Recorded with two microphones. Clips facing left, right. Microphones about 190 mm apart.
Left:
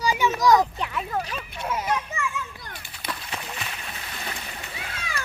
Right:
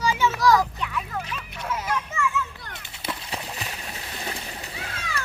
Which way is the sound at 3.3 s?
35° right (ahead or behind).